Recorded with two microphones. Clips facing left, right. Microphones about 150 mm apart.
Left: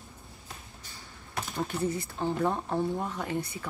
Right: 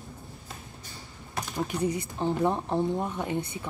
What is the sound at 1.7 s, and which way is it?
Speech, 15° right (ahead or behind).